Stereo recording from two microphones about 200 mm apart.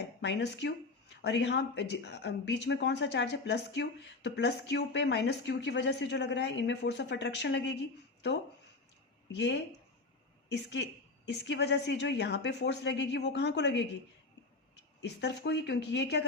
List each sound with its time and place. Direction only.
0.0 s speech: 60° left (ahead or behind)
9.3 s speech: 60° left (ahead or behind)
15.0 s speech: 60° left (ahead or behind)